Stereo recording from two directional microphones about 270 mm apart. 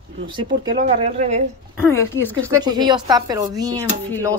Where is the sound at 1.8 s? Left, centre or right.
Centre.